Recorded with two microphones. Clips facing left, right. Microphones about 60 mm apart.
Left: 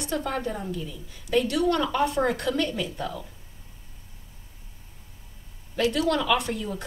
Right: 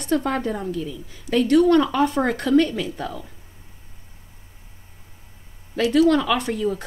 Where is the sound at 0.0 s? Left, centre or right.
Right.